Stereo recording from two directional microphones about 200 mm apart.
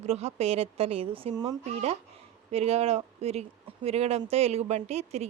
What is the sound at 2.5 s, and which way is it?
A woman's voice, 30° right (ahead or behind).